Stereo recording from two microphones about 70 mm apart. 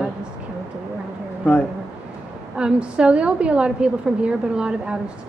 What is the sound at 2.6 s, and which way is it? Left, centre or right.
A woman's voice, centre.